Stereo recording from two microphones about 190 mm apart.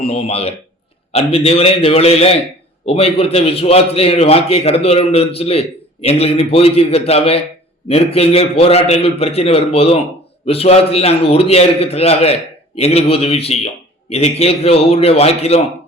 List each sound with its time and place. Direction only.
0.0 s a man's voice: 30° left (ahead or behind)